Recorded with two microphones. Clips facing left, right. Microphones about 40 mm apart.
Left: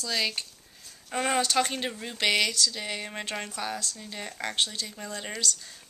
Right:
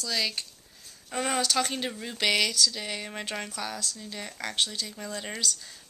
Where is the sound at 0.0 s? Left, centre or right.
Centre.